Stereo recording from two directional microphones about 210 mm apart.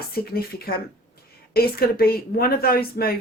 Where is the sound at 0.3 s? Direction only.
45° left (ahead or behind).